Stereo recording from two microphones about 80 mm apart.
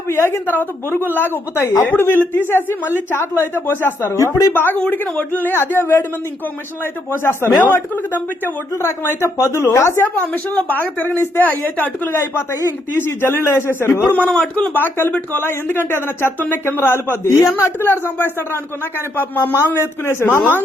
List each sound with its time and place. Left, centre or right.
0.1 s speech: left
4.2 s speech: left
4.5 s speech: left
7.1 s speech: left
10.3 s speech: left
14.3 s a man's voice: centre
15.1 s speech: left